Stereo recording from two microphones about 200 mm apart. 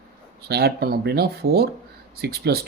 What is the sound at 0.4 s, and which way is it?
Speech, 55° right (ahead or behind).